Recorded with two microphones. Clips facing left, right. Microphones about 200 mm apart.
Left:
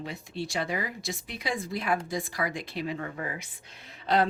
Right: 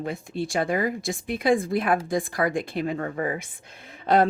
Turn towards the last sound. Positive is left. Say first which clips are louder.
# right 5 dB
turn(degrees=-50)  # may be behind; listen again after turning